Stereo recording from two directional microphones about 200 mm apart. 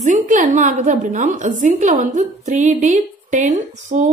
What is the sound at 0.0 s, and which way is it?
A woman's voice, 40° right (ahead or behind).